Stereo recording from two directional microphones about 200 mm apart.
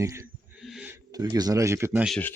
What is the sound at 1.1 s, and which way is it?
Speech, 20° right (ahead or behind).